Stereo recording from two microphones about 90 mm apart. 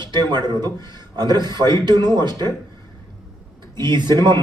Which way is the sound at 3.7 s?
55° right (ahead or behind).